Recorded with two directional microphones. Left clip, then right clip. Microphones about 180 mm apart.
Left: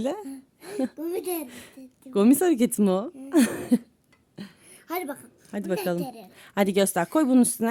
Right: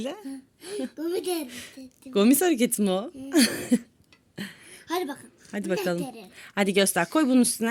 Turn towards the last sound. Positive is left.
turn(degrees=30)  # may be behind; listen again after turning